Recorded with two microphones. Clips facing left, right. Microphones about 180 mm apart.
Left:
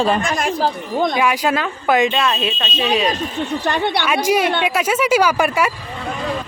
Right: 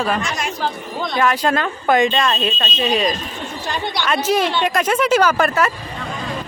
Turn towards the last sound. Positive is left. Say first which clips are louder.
# even
turn(degrees=10)  # may be behind; listen again after turning